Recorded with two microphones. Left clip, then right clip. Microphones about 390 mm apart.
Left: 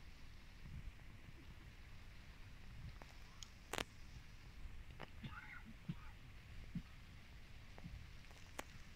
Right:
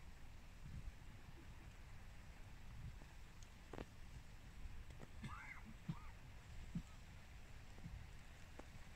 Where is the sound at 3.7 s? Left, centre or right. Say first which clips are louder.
Left 10 dB; left.